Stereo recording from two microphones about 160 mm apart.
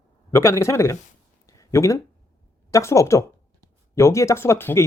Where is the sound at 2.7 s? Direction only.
20° left (ahead or behind).